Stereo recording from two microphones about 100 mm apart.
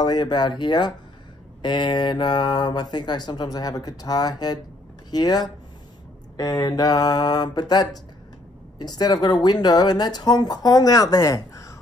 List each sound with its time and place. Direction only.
0.0 s speech: 45° left (ahead or behind)
6.3 s a sound: 35° left (ahead or behind)
8.7 s speech: 45° left (ahead or behind)